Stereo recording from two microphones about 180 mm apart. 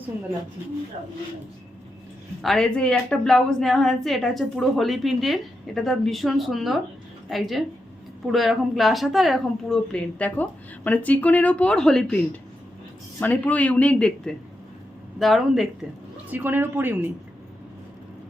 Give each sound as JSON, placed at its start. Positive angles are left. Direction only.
{"t": 2.4, "sound": "a woman's voice", "side_deg": 0}